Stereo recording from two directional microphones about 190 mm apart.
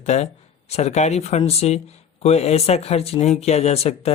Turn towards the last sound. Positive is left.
turn(degrees=35)  # may be behind; listen again after turning